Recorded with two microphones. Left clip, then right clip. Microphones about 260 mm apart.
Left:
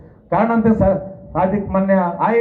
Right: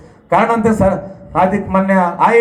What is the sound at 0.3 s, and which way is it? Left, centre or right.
A man's voice, right.